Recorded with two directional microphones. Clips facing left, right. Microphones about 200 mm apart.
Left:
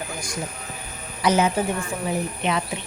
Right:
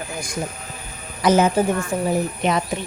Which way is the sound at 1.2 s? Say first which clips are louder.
Right 4 dB; 45° right (ahead or behind).